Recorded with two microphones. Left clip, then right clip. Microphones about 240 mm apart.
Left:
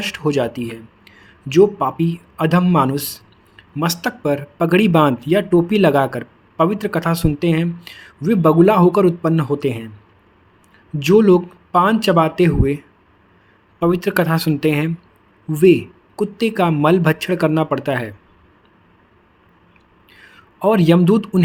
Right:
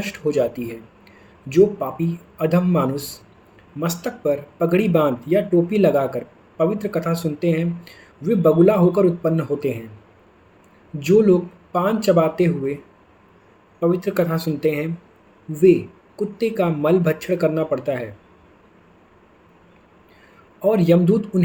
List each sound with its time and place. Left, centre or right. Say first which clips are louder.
0.0 s speech: left 1 dB; left
11.0 s speech: left 3 dB; left
20.6 s speech: left 2 dB; left